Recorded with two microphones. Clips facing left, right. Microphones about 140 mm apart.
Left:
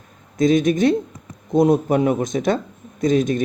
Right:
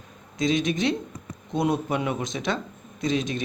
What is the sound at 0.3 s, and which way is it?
Speech, 50° left (ahead or behind).